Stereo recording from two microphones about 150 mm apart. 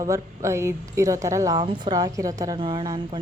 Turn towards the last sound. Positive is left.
turn(degrees=-35)  # may be behind; listen again after turning